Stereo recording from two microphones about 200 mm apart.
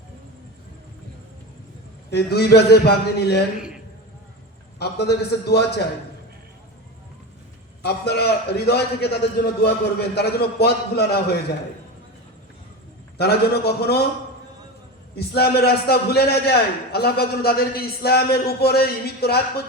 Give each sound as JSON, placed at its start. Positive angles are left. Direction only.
{"t": 2.0, "sound": "a man's voice", "side_deg": 55}
{"t": 4.8, "sound": "a man's voice", "side_deg": 55}
{"t": 7.8, "sound": "a man's voice", "side_deg": 55}
{"t": 13.1, "sound": "a man's voice", "side_deg": 55}
{"t": 15.1, "sound": "a man's voice", "side_deg": 55}